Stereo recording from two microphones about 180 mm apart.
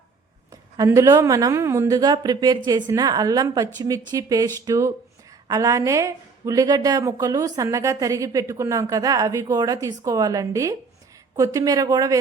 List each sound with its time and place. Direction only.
0.8 s speech: 15° right (ahead or behind)